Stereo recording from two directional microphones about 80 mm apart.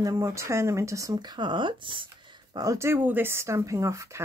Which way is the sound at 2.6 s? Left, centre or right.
Right.